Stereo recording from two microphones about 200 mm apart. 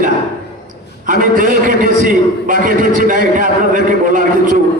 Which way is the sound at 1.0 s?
40° right (ahead or behind).